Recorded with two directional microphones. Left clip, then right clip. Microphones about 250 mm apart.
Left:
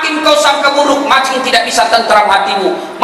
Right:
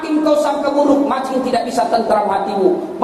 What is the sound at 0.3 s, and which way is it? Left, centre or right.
A man's voice, left.